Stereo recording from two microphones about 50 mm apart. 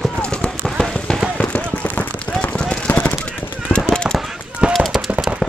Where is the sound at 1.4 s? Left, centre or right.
Left.